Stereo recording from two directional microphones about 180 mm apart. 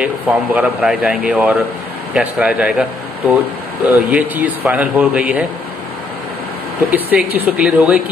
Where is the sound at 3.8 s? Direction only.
10° right (ahead or behind).